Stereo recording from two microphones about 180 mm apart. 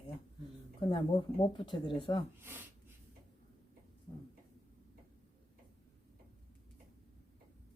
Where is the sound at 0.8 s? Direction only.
25° left (ahead or behind).